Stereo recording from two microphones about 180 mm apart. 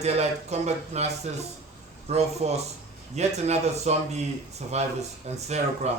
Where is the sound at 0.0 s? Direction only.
35° right (ahead or behind).